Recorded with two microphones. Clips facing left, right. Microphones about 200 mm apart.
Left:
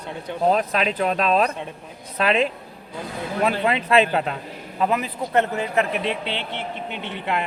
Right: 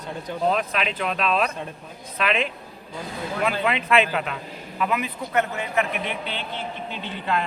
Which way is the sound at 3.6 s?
35° left (ahead or behind).